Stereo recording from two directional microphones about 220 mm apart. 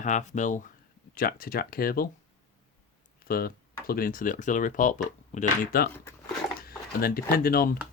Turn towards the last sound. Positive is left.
turn(degrees=40)  # may be behind; listen again after turning